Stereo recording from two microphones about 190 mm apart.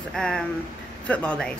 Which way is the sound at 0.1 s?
5° left (ahead or behind).